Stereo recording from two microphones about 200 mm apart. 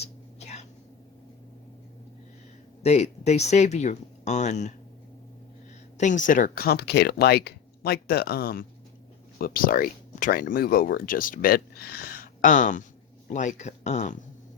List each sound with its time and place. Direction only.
0.0 s whispering: 35° left (ahead or behind)
2.8 s speech: 35° left (ahead or behind)
6.0 s speech: 40° left (ahead or behind)